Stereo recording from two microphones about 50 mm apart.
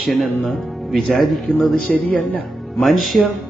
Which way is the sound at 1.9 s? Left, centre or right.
Left.